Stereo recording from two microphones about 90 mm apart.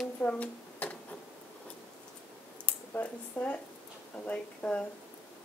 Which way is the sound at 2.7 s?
15° left (ahead or behind).